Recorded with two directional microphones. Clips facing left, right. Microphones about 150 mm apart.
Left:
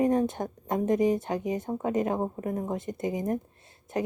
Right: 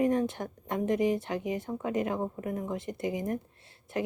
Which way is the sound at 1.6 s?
25° left (ahead or behind).